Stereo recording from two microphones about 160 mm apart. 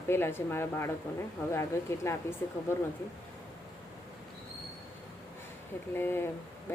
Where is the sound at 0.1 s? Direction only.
15° left (ahead or behind).